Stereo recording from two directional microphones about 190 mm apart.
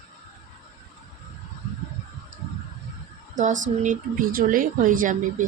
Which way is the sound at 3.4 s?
40° right (ahead or behind).